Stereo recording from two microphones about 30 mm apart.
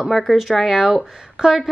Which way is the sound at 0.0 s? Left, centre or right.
Centre.